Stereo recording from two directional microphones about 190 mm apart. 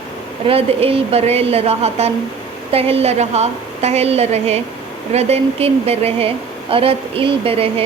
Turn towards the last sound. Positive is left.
turn(degrees=-30)  # may be behind; listen again after turning